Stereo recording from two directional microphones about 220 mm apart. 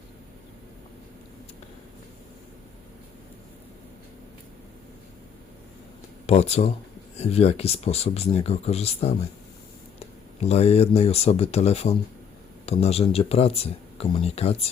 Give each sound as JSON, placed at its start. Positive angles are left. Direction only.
{"t": 6.2, "sound": "speech", "side_deg": 30}
{"t": 10.4, "sound": "speech", "side_deg": 30}